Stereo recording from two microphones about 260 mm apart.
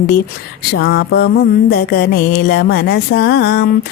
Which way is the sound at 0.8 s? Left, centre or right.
Left.